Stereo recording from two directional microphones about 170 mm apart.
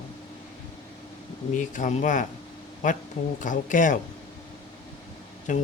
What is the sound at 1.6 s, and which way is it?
Speech, 50° left (ahead or behind).